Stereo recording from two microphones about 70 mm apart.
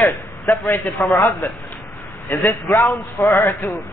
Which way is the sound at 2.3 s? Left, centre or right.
Left.